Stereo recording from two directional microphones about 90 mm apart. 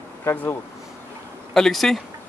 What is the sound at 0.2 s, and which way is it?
Speech, 25° left (ahead or behind).